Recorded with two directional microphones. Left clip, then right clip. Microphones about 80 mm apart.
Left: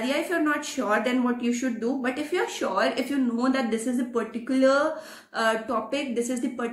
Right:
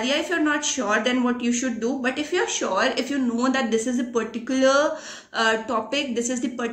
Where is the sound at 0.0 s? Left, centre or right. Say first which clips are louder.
Right 3 dB; right.